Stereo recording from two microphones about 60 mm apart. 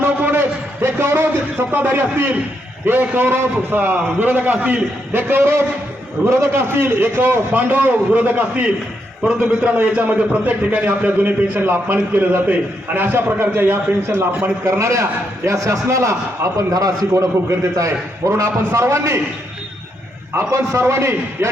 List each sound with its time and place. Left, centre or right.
0.0 s a sound: right
2.8 s a man's voice: right
5.1 s a man's voice: right
14.6 s a man's voice: right
16.7 s a man's voice: right
20.3 s a man's voice: right